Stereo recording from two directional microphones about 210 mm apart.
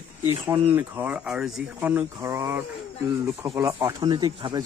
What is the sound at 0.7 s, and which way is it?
Speech, 10° right (ahead or behind).